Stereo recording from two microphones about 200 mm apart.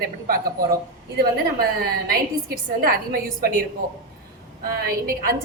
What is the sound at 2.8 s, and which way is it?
Speech, 45° right (ahead or behind).